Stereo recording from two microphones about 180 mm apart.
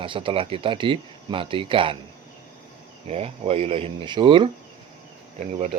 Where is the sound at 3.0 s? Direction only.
35° right (ahead or behind).